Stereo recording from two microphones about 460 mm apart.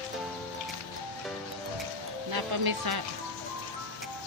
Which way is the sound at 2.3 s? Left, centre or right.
Right.